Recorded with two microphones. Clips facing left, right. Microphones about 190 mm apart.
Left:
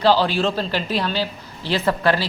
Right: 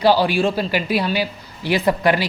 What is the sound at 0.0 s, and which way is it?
A woman's voice, 10° right (ahead or behind).